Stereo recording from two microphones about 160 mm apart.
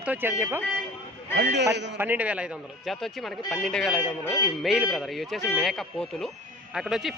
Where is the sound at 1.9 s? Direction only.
10° right (ahead or behind).